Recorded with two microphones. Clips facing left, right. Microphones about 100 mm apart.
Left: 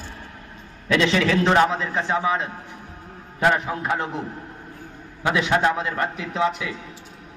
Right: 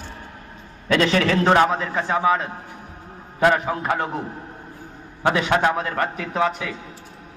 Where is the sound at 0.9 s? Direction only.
40° right (ahead or behind).